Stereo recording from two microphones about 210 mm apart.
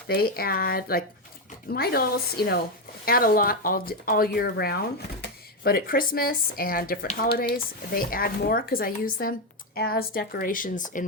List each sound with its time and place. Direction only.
0.1 s speech: 45° left (ahead or behind)